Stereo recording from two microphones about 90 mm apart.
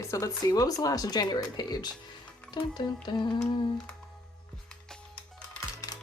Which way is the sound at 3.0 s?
55° left (ahead or behind).